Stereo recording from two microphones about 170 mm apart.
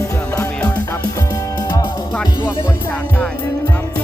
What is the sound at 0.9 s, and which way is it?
Music, 20° left (ahead or behind).